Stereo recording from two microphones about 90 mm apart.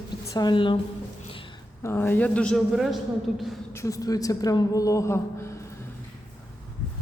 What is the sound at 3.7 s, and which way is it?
A woman's voice, 35° left (ahead or behind).